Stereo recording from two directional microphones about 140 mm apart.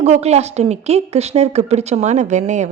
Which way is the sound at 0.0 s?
50° right (ahead or behind).